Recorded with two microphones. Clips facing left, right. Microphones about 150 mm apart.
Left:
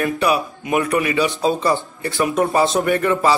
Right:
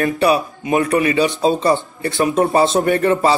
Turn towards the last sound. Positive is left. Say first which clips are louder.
# right 3 dB
turn(degrees=-40)  # may be behind; listen again after turning